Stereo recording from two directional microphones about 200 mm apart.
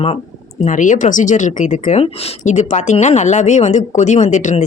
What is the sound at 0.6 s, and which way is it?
Speech, 40° left (ahead or behind).